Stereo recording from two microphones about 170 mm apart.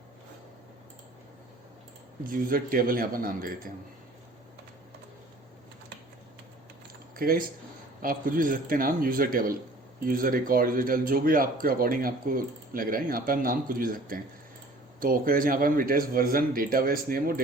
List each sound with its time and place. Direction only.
2.2 s a man's voice: 55° right (ahead or behind)
7.2 s a man's voice: 60° right (ahead or behind)